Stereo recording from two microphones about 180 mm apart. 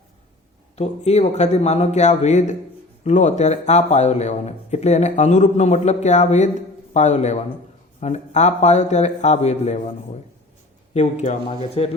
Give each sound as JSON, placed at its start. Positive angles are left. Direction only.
{"t": 0.8, "sound": "speech", "side_deg": 40}
{"t": 10.9, "sound": "speech", "side_deg": 40}